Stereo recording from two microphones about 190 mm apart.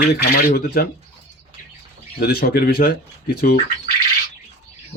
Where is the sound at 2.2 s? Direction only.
55° left (ahead or behind).